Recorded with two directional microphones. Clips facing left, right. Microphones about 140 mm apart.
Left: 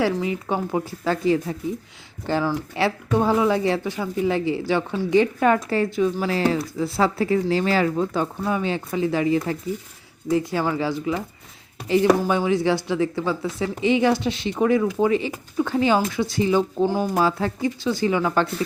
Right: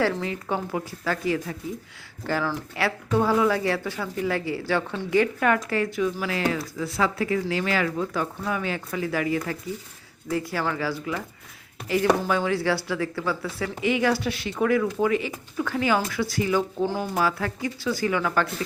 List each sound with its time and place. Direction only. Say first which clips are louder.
0.2 s speech: left 4 dB; 20° left (ahead or behind)
12.2 s speech: left 4 dB; 15° left (ahead or behind)